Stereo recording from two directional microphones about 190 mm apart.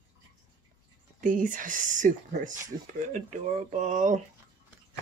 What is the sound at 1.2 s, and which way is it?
Speech, 45° right (ahead or behind).